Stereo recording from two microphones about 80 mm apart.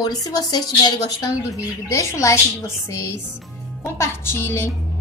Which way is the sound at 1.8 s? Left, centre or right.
Left.